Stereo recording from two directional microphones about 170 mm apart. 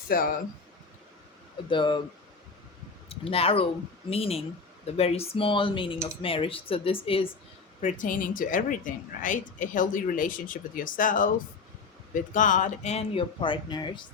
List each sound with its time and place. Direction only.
0.1 s speech: 60° left (ahead or behind)
1.7 s speech: 30° left (ahead or behind)
3.1 s speech: 35° left (ahead or behind)
7.8 s a woman's voice: 45° left (ahead or behind); by 14.0 s 25° left (ahead or behind)